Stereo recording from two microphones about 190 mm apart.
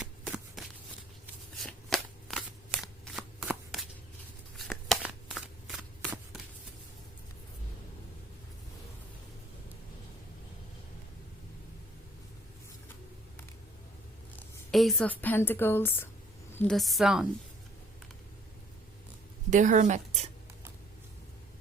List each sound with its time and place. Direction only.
0.0 s shuffling cards: 5° right (ahead or behind)
14.3 s a woman's voice: centre (ahead or behind)
19.5 s speech: 40° right (ahead or behind)